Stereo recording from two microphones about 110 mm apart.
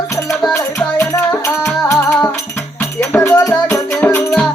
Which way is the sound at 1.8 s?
30° left (ahead or behind).